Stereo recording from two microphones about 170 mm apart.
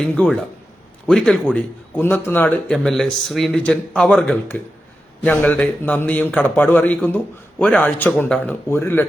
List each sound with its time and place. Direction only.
0.1 s a man's voice: 5° left (ahead or behind)